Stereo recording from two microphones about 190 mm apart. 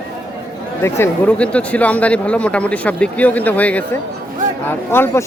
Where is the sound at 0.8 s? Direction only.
10° left (ahead or behind).